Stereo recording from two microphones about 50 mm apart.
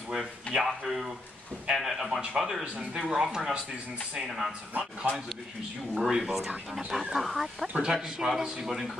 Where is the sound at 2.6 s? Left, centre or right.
Right.